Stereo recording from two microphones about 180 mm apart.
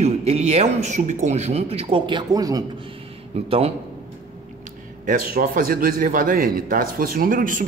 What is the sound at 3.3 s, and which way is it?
Speech, 35° right (ahead or behind).